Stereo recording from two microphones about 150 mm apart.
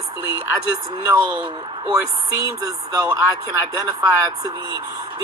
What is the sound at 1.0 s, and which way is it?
Speech, 15° right (ahead or behind).